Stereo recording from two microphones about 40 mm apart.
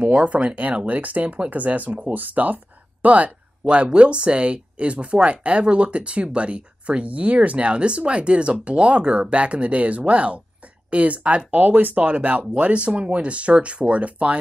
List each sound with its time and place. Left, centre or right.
0.2 s speech: right
11.6 s speech: right